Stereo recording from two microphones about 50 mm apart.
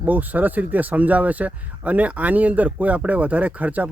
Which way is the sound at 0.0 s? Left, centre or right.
Right.